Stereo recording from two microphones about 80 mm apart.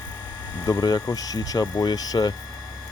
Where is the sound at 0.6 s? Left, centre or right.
Left.